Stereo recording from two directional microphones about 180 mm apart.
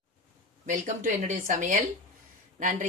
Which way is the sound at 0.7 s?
45° right (ahead or behind).